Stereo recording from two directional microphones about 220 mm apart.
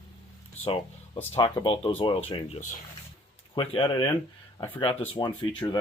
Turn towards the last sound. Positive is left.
turn(degrees=20)  # may be behind; listen again after turning